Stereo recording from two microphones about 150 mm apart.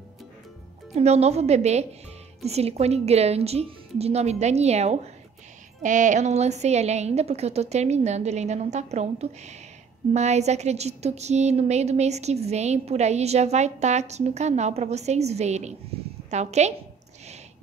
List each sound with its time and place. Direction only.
0.9 s a woman's voice: 45° right (ahead or behind)
5.8 s a woman's voice: 55° right (ahead or behind)